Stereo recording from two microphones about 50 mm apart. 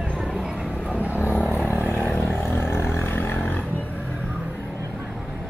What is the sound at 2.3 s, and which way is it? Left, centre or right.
Vehicle, left.